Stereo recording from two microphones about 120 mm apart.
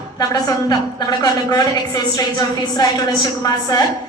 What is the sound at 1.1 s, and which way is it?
A woman's voice, 35° left (ahead or behind).